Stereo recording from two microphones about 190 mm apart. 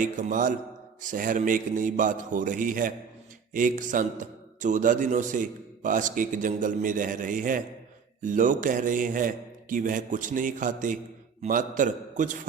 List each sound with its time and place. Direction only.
0.0 s a man's voice: 45° right (ahead or behind)